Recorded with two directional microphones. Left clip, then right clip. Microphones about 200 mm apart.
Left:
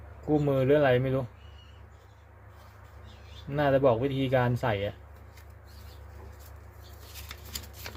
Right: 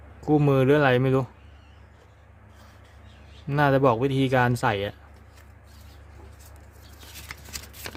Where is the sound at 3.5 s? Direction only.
30° right (ahead or behind).